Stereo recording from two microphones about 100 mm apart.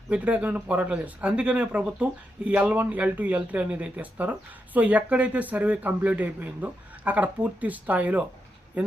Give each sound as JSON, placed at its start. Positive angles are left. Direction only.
{"t": 0.1, "sound": "speech", "side_deg": -10}